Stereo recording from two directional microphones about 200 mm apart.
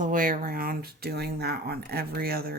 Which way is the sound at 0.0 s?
45° right (ahead or behind).